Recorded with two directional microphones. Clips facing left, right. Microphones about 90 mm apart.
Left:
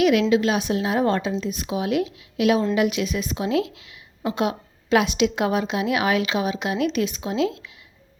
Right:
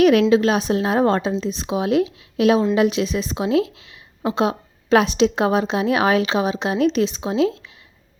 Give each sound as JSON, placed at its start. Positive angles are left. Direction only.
{"t": 0.0, "sound": "speech", "side_deg": -40}